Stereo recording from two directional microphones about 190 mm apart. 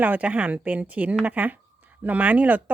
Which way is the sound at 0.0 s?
10° right (ahead or behind).